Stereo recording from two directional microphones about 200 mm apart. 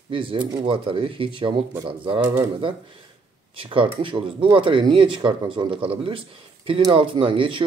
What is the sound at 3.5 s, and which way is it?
Speech, 25° right (ahead or behind).